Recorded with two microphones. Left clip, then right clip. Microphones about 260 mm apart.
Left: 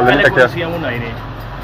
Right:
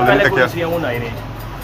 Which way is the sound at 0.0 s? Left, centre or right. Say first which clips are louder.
Left 2 dB; centre.